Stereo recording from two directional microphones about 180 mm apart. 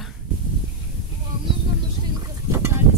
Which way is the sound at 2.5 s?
15° right (ahead or behind).